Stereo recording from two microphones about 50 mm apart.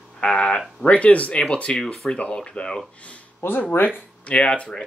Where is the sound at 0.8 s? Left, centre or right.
Left.